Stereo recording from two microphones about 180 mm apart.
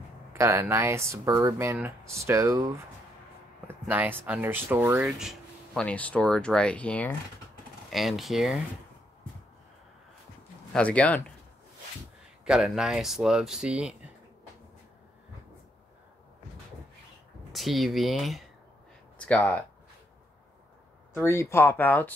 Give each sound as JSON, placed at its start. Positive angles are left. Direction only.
{"t": 0.3, "sound": "speech", "side_deg": -15}
{"t": 5.0, "sound": "speech", "side_deg": 0}
{"t": 10.7, "sound": "speech", "side_deg": 5}
{"t": 12.4, "sound": "speech", "side_deg": -5}
{"t": 17.5, "sound": "speech", "side_deg": 0}
{"t": 21.1, "sound": "speech", "side_deg": 10}